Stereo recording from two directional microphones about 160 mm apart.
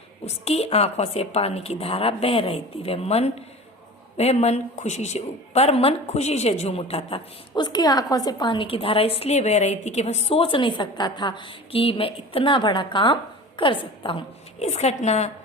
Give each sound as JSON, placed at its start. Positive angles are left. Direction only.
{"t": 0.3, "sound": "a woman's voice", "side_deg": 40}